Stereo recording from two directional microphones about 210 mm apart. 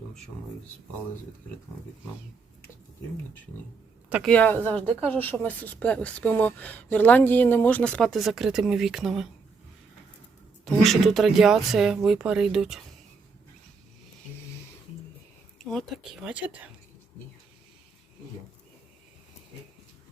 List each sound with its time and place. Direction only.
4.1 s speech: centre (ahead or behind)
10.8 s speech: centre (ahead or behind)
15.7 s speech: centre (ahead or behind)